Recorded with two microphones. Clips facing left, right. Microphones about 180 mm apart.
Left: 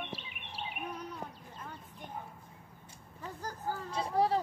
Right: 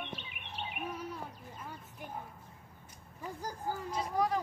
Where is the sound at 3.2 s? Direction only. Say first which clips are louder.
Even; 10° right (ahead or behind).